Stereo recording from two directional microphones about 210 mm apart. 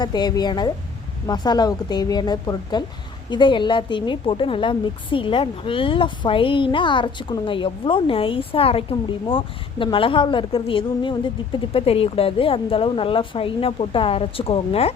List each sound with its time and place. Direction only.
0.0 s a woman's voice: 20° left (ahead or behind)